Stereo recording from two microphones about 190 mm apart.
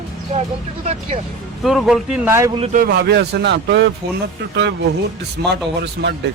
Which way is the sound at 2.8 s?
60° right (ahead or behind).